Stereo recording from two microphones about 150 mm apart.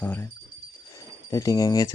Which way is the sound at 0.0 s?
15° left (ahead or behind).